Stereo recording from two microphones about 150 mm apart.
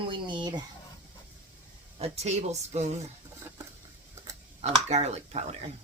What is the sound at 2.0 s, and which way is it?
Speech, 50° right (ahead or behind).